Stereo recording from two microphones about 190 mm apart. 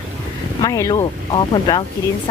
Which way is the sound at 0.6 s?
20° left (ahead or behind).